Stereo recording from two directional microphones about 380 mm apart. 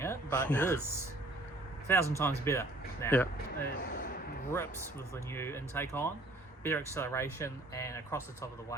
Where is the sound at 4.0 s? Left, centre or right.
Left.